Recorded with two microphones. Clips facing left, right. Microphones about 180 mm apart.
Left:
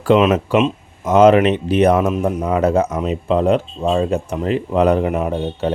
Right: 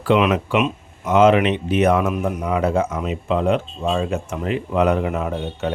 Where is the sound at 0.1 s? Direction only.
40° left (ahead or behind).